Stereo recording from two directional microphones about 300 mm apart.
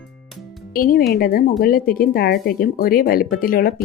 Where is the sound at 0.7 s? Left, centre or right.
Left.